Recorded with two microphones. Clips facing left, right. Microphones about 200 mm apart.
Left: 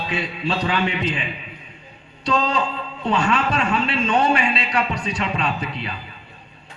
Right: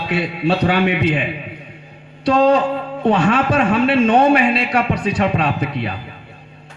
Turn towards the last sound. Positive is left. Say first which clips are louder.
# right 5 dB
turn(degrees=-55)  # may be behind; listen again after turning